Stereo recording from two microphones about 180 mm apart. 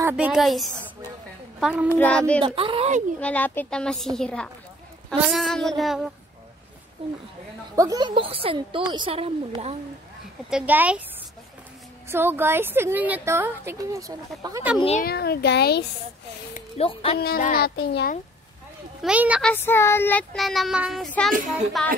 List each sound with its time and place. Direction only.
0.0 s child singing: 5° right (ahead or behind)
1.9 s speech: 10° left (ahead or behind)
2.4 s a woman's voice: 30° right (ahead or behind)
3.2 s child singing: 10° left (ahead or behind)
7.0 s a woman's voice: 30° right (ahead or behind)
7.7 s a woman's voice: 20° right (ahead or behind); by 9.8 s 35° right (ahead or behind)
10.5 s a woman's voice: 10° right (ahead or behind)
12.1 s a woman's voice: 10° right (ahead or behind)
15.0 s a child's voice: 60° left (ahead or behind)
16.5 s a woman's voice: 35° left (ahead or behind)
17.2 s a child's voice: 50° left (ahead or behind)
19.0 s a woman's voice: 5° right (ahead or behind)
19.4 s child singing: 10° left (ahead or behind)